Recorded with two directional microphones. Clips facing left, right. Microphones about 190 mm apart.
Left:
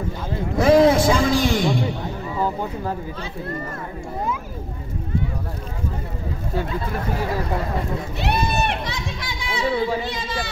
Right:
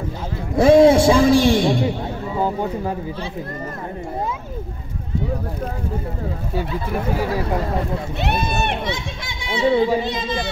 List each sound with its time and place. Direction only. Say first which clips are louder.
0.6 s a man's voice: right 3 dB; 30° right (ahead or behind)
8.8 s speech: right 3 dB; 25° right (ahead or behind)